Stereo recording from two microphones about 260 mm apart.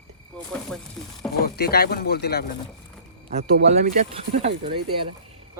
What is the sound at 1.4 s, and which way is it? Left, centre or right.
Speech, left.